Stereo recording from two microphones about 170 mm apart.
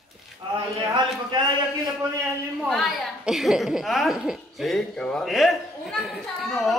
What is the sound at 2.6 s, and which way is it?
A woman's voice, centre (ahead or behind).